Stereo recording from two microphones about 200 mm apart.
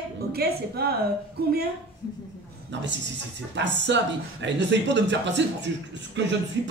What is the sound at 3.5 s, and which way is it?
Speech, 60° right (ahead or behind).